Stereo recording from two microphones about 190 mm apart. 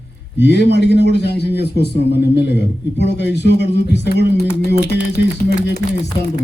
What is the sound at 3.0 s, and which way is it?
A man's voice, 65° left (ahead or behind).